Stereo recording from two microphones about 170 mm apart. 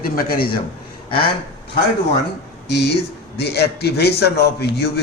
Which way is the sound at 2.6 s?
85° left.